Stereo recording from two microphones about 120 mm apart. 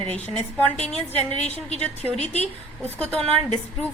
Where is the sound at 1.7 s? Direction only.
65° left (ahead or behind).